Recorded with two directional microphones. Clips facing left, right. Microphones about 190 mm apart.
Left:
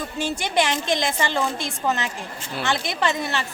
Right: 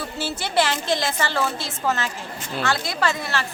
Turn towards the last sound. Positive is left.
turn(degrees=20)  # may be behind; listen again after turning